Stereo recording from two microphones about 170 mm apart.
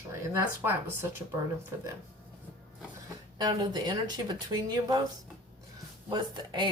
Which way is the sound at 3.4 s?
25° right (ahead or behind).